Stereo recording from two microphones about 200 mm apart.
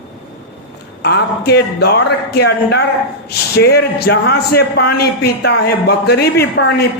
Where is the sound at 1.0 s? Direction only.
55° left (ahead or behind).